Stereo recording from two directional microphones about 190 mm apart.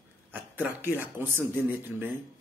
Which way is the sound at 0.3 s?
10° right (ahead or behind).